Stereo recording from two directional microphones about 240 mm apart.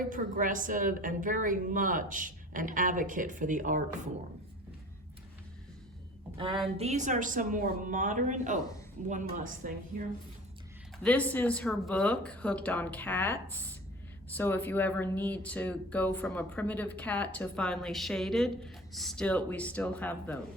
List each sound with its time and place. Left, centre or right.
0.0 s a woman's voice: right
6.3 s a woman's voice: right
11.0 s a woman's voice: centre